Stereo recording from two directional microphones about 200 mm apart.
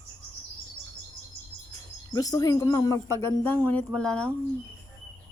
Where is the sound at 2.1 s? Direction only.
20° left (ahead or behind).